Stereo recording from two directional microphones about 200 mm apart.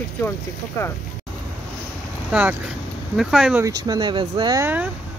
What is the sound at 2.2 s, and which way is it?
Speech, 5° right (ahead or behind).